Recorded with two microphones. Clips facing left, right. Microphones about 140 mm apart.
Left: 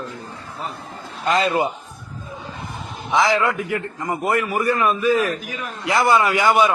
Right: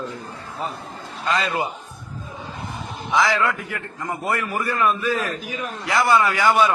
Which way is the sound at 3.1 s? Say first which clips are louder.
Left 2 dB; 20° left (ahead or behind).